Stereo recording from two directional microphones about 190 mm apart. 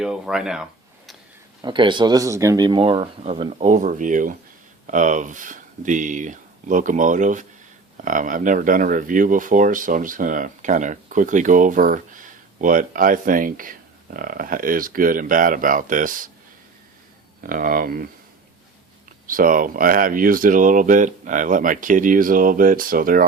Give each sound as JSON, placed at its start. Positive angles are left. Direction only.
{"t": 0.0, "sound": "speech", "side_deg": -5}
{"t": 1.6, "sound": "speech", "side_deg": -25}
{"t": 17.4, "sound": "speech", "side_deg": -50}
{"t": 19.3, "sound": "speech", "side_deg": -45}